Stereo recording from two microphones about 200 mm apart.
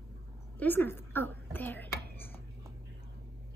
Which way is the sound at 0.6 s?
10° left (ahead or behind).